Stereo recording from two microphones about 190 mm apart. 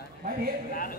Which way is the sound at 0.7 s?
50° left (ahead or behind).